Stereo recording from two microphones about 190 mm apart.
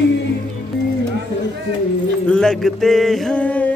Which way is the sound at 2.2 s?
5° left (ahead or behind).